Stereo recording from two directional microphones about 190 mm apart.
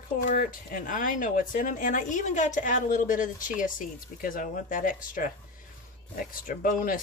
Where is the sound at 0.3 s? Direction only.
45° left (ahead or behind).